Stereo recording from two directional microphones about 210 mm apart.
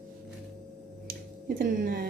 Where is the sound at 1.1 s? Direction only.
45° right (ahead or behind).